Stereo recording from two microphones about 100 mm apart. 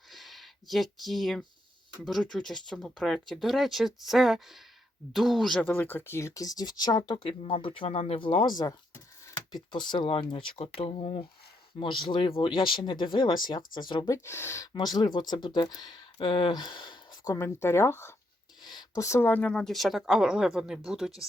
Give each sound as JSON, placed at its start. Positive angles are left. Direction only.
{"t": 0.1, "sound": "a sound", "side_deg": 0}
{"t": 2.0, "sound": "speech", "side_deg": 5}
{"t": 5.6, "sound": "speech", "side_deg": 20}
{"t": 7.3, "sound": "speech", "side_deg": 65}
{"t": 9.5, "sound": "speech", "side_deg": 45}
{"t": 11.8, "sound": "speech", "side_deg": 55}
{"t": 14.1, "sound": "speech", "side_deg": 25}
{"t": 14.7, "sound": "speech", "side_deg": 45}
{"t": 16.2, "sound": "speech", "side_deg": 55}
{"t": 17.2, "sound": "speech", "side_deg": 25}
{"t": 18.6, "sound": "a sound", "side_deg": 45}
{"t": 18.9, "sound": "speech", "side_deg": 30}